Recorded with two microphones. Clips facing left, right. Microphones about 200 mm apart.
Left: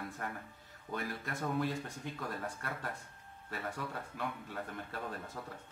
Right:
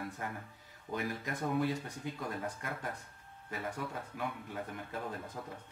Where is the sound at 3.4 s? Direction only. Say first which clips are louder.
Right 1 dB; 15° right (ahead or behind).